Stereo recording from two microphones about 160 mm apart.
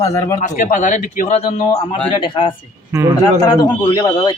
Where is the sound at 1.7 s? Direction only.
30° left (ahead or behind).